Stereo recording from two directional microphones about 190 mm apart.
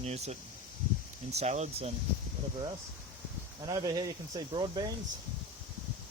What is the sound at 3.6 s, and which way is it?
Speech, 20° right (ahead or behind).